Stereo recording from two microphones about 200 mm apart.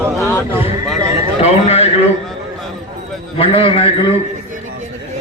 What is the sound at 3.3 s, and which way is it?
Speech, 25° left (ahead or behind).